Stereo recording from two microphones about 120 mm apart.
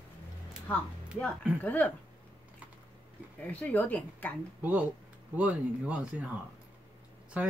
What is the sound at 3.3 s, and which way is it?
Speech, 10° left (ahead or behind).